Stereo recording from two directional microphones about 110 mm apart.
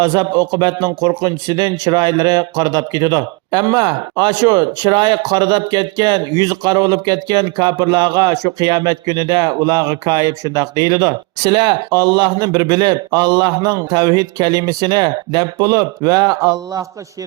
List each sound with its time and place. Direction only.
0.0 s speech: 40° right (ahead or behind)